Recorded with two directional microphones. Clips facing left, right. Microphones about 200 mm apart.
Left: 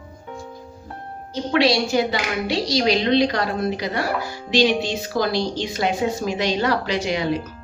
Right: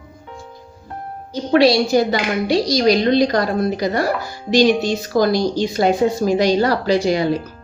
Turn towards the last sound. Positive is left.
turn(degrees=-35)  # may be behind; listen again after turning